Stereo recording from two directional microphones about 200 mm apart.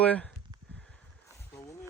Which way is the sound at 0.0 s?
5° left (ahead or behind).